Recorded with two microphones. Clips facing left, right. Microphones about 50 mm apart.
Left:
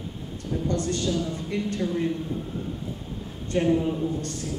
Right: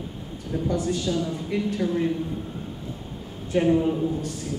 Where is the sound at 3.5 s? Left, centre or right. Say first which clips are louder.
Right 2 dB; centre.